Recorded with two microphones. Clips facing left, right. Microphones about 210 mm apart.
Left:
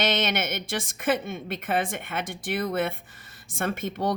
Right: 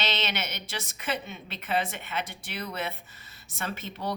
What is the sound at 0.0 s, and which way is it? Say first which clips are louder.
A woman's voice: left 6 dB; 50° left (ahead or behind).